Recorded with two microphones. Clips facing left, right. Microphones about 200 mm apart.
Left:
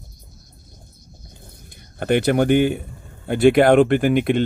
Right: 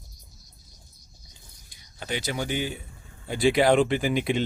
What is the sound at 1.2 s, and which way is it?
Speech, 55° left (ahead or behind).